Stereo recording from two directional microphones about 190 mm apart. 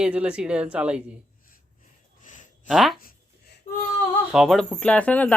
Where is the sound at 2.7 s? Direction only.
Centre (ahead or behind).